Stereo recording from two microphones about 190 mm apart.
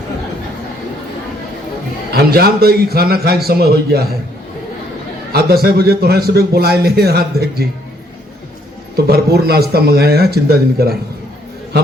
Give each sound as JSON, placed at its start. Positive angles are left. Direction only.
{"t": 2.1, "sound": "a man's voice", "side_deg": -55}
{"t": 5.3, "sound": "a man's voice", "side_deg": -55}
{"t": 9.0, "sound": "a man's voice", "side_deg": -55}